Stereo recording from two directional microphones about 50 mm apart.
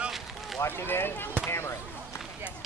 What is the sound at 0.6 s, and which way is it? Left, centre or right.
Speech, left.